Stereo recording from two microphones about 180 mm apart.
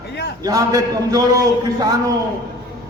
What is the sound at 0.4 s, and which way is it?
A man's voice, 20° right (ahead or behind).